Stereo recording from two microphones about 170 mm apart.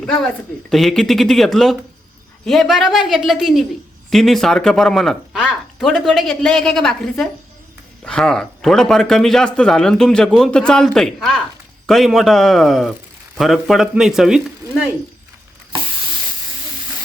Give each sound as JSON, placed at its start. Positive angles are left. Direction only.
{"t": 0.0, "sound": "speech", "side_deg": 5}